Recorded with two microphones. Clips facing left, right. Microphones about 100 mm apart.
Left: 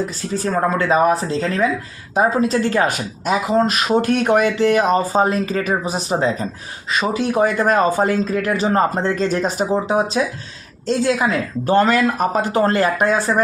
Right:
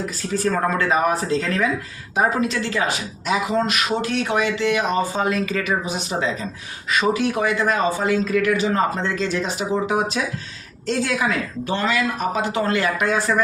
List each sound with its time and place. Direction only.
0.4 s speech: 30° left (ahead or behind)
10.8 s speech: 35° left (ahead or behind)